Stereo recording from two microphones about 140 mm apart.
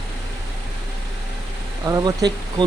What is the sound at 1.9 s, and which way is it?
Speech, 25° right (ahead or behind).